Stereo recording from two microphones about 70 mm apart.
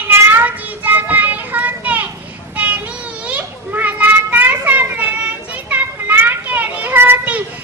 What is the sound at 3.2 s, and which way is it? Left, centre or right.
Children playing, right.